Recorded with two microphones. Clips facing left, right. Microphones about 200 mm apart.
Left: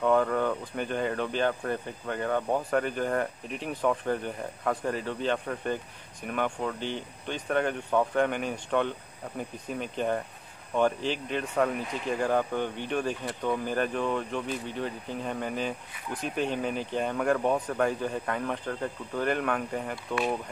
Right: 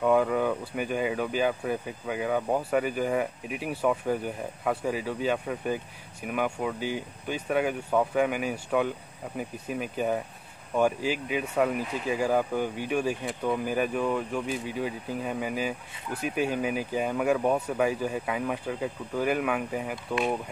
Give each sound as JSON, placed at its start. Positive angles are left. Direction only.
{"t": 0.0, "sound": "speech", "side_deg": -10}